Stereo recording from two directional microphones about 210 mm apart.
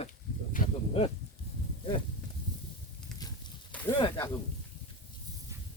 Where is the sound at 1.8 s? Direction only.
25° left (ahead or behind).